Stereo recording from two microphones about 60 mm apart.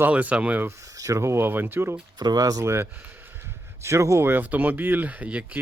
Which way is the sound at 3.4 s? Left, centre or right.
Right.